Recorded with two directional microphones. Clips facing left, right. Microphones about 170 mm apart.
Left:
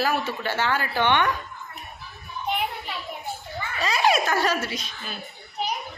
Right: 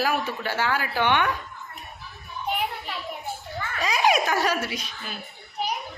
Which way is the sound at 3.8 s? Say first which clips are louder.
Even; 15° right (ahead or behind).